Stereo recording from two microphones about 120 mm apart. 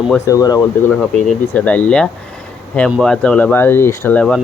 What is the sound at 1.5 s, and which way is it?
Speech, 15° left (ahead or behind).